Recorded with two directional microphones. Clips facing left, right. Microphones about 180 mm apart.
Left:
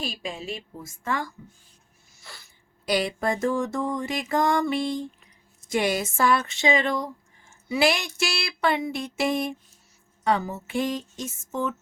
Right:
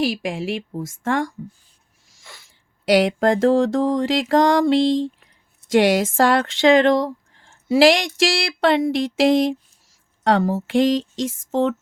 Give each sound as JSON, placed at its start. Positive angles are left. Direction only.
{"t": 0.0, "sound": "music", "side_deg": -90}
{"t": 2.5, "sound": "a sound", "side_deg": -90}
{"t": 10.2, "sound": "music", "side_deg": -90}